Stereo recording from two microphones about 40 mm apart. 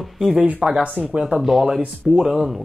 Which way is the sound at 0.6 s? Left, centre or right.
Right.